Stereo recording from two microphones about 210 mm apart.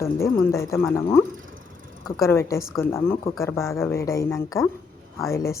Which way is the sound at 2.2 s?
15° left (ahead or behind).